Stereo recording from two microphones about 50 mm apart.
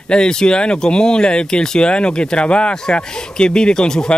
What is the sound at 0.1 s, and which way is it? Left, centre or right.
Speech, centre.